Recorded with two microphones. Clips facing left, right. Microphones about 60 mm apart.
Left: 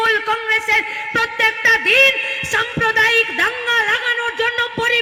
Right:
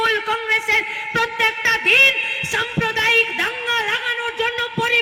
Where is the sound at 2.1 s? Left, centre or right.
Centre.